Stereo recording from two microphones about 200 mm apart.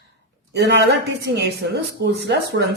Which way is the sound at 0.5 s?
60° right (ahead or behind).